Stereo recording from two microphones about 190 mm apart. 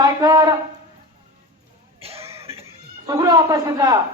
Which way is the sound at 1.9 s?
30° right (ahead or behind).